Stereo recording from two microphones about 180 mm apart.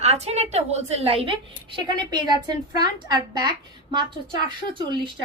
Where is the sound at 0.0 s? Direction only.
35° right (ahead or behind).